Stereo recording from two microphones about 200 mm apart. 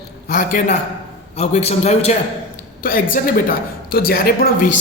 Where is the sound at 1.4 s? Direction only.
35° left (ahead or behind).